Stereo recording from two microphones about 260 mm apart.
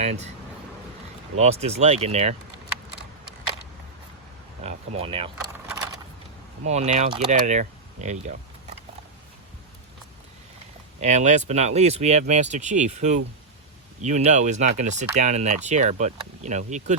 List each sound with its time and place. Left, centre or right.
0.0 s speech: right
1.4 s speech: right
4.6 s speech: right
5.6 s a sound: centre
6.7 s speech: right
11.0 s speech: right